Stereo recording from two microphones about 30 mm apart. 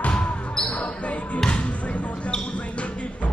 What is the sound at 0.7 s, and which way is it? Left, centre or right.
Basketball bounce, left.